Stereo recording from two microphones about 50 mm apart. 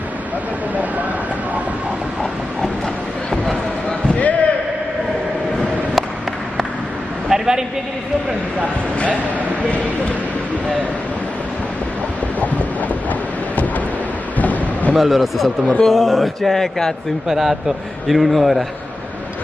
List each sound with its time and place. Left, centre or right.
4.1 s basketball bounce: left
7.2 s a sound: centre
12.4 s train: left
14.4 s a sound: left
15.0 s a man's voice: centre
17.3 s a man's voice: centre